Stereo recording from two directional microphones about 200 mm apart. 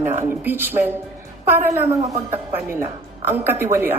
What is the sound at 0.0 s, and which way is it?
A woman's voice, 10° right (ahead or behind).